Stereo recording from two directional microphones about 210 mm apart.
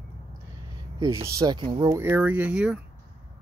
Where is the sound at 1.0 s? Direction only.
15° right (ahead or behind).